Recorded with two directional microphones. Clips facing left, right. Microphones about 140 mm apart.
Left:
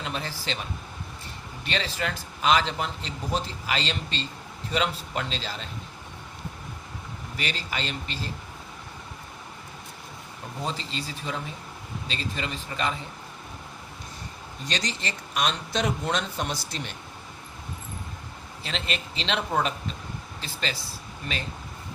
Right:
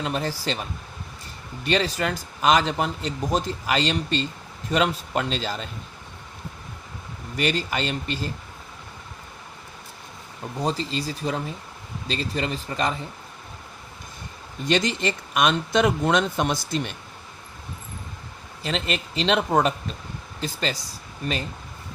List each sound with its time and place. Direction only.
0.0 s a man's voice: 45° right (ahead or behind)
1.6 s a man's voice: 45° right (ahead or behind)
7.3 s a man's voice: 50° right (ahead or behind)
10.6 s speech: 40° right (ahead or behind)
14.7 s speech: 55° right (ahead or behind)
18.6 s a man's voice: 45° right (ahead or behind)